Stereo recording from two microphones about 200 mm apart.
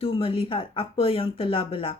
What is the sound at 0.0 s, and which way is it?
Speech, 25° left (ahead or behind).